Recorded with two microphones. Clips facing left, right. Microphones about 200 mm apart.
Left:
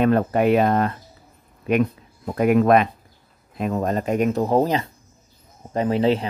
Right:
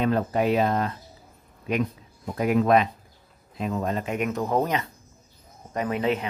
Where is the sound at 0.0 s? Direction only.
60° left (ahead or behind).